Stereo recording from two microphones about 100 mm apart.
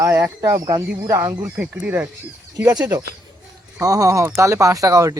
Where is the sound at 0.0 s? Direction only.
25° right (ahead or behind).